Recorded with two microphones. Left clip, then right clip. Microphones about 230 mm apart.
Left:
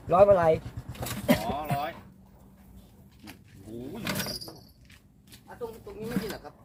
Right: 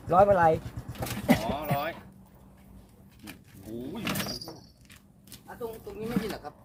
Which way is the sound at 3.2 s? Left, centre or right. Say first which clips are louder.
Right 2 dB; right.